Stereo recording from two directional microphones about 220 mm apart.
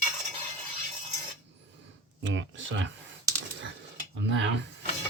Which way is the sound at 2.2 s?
60° right (ahead or behind).